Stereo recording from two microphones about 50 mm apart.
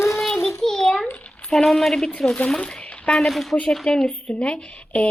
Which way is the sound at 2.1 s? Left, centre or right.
Centre.